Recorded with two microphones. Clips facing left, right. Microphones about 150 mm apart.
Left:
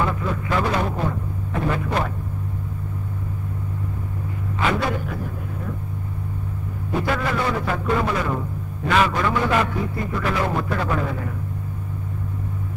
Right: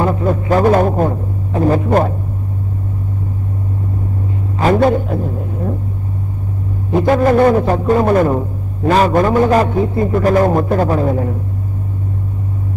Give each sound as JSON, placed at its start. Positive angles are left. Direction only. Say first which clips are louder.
{"t": 0.0, "sound": "speech", "louder": "right 8 dB", "side_deg": -40}
{"t": 4.6, "sound": "a sound", "louder": "right 10 dB", "side_deg": -45}
{"t": 4.9, "sound": "a sound", "louder": "right 10 dB", "side_deg": -25}
{"t": 7.1, "sound": "a man's voice", "louder": "right 14 dB", "side_deg": -45}
{"t": 9.7, "sound": "a man's voice", "louder": "right 10 dB", "side_deg": -30}
{"t": 10.1, "sound": "speech", "louder": "right 11 dB", "side_deg": -45}